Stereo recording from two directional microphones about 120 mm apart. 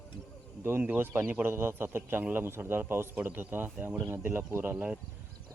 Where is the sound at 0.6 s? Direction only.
15° right (ahead or behind).